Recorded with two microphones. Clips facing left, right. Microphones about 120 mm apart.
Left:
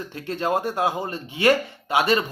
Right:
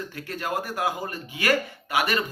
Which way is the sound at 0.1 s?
25° left (ahead or behind).